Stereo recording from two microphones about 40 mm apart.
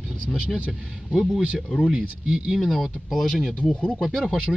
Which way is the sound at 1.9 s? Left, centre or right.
Centre.